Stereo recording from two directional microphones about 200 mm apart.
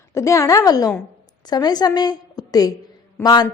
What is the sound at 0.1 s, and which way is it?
A woman's voice, 15° left (ahead or behind).